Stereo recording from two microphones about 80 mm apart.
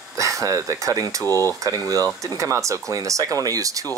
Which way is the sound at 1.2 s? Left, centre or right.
Left.